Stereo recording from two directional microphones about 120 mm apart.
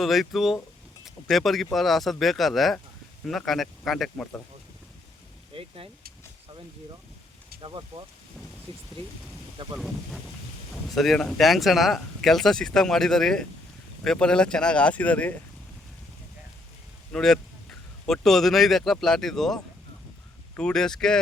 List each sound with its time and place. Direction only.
0.0 s speech: centre (ahead or behind)
5.5 s vehicle: 50° right (ahead or behind)
7.6 s speech: 40° right (ahead or behind)
9.7 s speech: centre (ahead or behind)
17.1 s speech: 5° left (ahead or behind)
20.6 s speech: 5° left (ahead or behind)